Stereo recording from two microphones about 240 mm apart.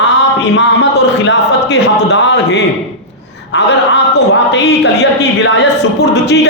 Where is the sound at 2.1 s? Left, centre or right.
Left.